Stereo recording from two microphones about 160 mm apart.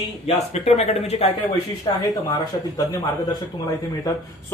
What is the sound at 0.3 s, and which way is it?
Speech, 40° left (ahead or behind).